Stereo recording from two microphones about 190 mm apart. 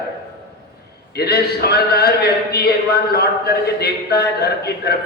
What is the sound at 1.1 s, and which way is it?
Speech, 55° left (ahead or behind).